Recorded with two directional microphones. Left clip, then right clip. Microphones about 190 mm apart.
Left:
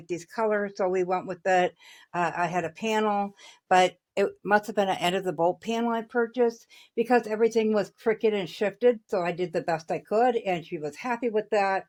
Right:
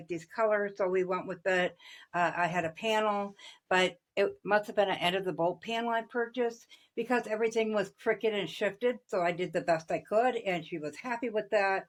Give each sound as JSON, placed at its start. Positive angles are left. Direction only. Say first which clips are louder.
{"t": 0.1, "sound": "speech", "louder": "left 2 dB", "side_deg": 65}